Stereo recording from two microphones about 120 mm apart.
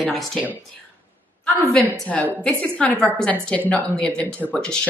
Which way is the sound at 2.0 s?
10° left (ahead or behind).